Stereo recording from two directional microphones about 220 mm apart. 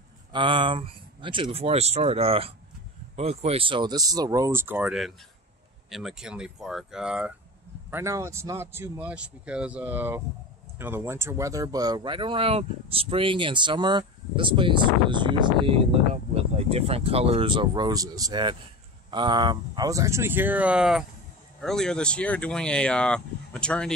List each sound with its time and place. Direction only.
0.3 s speech: 20° right (ahead or behind); by 23.9 s 5° left (ahead or behind)